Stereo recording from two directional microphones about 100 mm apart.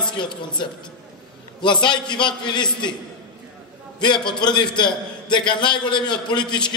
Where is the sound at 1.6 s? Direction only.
50° left (ahead or behind).